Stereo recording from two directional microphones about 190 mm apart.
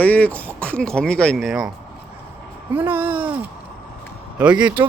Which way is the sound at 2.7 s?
10° right (ahead or behind).